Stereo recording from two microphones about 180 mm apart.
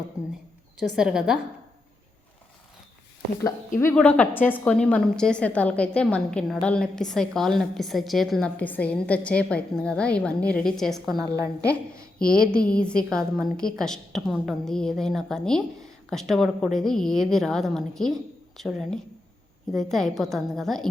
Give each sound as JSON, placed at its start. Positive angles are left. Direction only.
{"t": 0.9, "sound": "a woman's voice", "side_deg": -5}
{"t": 3.8, "sound": "a woman's voice", "side_deg": 10}
{"t": 11.2, "sound": "a woman's voice", "side_deg": -20}
{"t": 12.2, "sound": "speech", "side_deg": 55}
{"t": 12.5, "sound": "a woman's voice", "side_deg": 5}